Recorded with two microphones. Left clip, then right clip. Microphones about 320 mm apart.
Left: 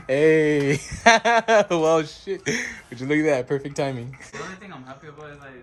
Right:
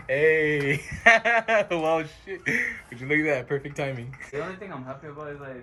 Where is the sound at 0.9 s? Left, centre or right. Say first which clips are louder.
Left 2 dB; centre.